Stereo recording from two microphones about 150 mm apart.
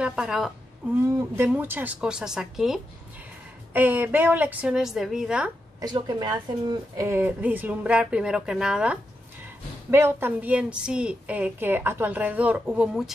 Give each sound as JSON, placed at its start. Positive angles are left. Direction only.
{"t": 0.0, "sound": "a woman's voice", "side_deg": -5}
{"t": 5.8, "sound": "speech", "side_deg": -25}
{"t": 7.0, "sound": "a woman's voice", "side_deg": -15}
{"t": 9.8, "sound": "a woman's voice", "side_deg": -15}